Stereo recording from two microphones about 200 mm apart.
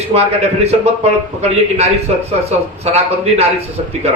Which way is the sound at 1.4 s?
30° right (ahead or behind).